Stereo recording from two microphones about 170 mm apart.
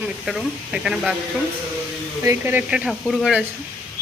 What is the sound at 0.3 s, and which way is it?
Speech, centre (ahead or behind).